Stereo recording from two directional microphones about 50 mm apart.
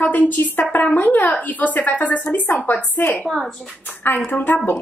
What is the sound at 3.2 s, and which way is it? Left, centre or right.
Speech, centre.